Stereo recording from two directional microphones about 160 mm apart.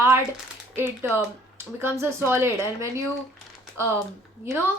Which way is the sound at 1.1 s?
15° right (ahead or behind).